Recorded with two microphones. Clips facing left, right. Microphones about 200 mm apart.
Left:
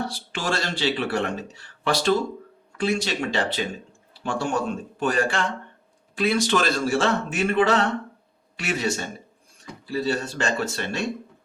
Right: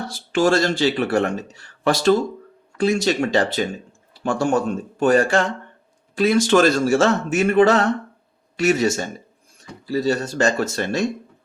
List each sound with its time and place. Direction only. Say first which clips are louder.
0.1 s a man's voice: right 10 dB; 45° right (ahead or behind)